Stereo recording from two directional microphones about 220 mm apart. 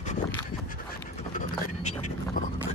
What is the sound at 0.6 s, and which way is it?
Vehicle, 40° left (ahead or behind).